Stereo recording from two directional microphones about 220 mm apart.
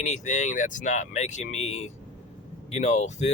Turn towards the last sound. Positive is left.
turn(degrees=30)  # may be behind; listen again after turning